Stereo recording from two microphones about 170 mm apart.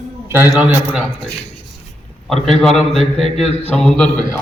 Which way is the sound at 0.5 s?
5° right (ahead or behind).